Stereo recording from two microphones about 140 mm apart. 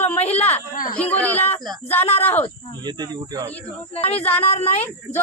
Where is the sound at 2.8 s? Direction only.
30° right (ahead or behind).